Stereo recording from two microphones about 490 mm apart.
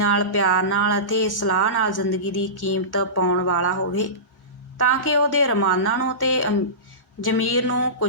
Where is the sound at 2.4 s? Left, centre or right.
Left.